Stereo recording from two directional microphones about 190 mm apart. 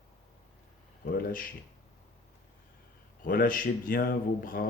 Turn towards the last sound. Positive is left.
turn(degrees=50)  # may be behind; listen again after turning